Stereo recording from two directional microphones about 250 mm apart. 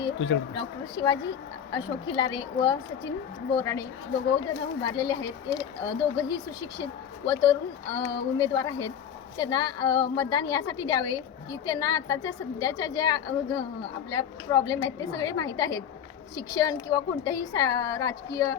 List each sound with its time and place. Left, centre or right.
0.5 s a woman's voice: centre